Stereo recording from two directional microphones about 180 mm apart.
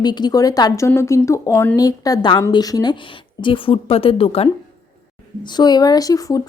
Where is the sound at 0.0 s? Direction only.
25° left (ahead or behind).